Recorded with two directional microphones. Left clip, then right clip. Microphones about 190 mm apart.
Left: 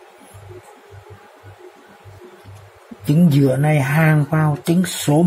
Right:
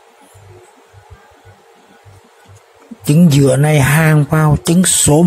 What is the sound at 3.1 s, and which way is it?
Speech, 25° right (ahead or behind).